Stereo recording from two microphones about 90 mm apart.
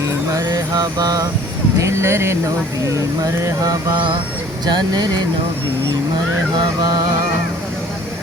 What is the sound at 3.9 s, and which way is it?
Music, 65° right (ahead or behind).